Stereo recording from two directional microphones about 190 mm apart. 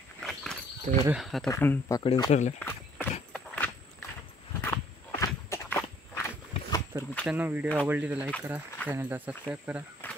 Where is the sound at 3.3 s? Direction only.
10° left (ahead or behind).